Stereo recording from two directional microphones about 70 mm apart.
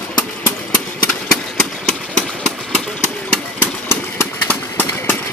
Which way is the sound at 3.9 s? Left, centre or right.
Left.